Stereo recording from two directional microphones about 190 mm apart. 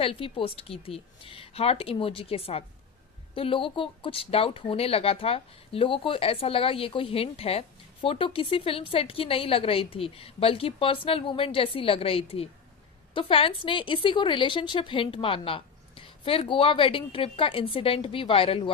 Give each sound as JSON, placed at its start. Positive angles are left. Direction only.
{"t": 0.0, "sound": "a woman's voice", "side_deg": 30}